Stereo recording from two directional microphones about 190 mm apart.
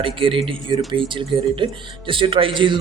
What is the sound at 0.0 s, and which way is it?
A man's voice, 25° right (ahead or behind).